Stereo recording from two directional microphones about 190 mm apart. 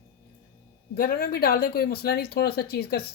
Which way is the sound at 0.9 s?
50° left (ahead or behind).